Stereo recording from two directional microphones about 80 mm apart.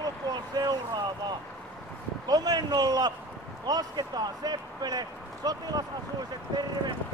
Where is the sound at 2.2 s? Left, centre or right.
Right.